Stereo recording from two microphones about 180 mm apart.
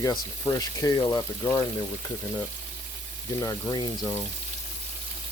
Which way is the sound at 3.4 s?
20° left (ahead or behind).